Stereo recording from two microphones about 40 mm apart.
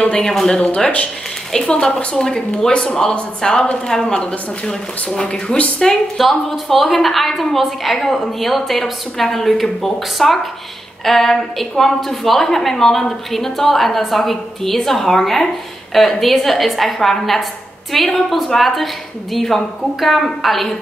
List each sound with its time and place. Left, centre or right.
0.2 s a woman's voice: centre
1.5 s a woman's voice: centre
6.1 s a woman's voice: centre